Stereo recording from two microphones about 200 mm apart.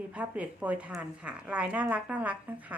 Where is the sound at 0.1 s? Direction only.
5° right (ahead or behind).